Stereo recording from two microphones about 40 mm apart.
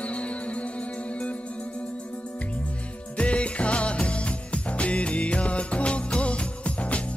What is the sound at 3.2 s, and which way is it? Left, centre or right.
Music, left.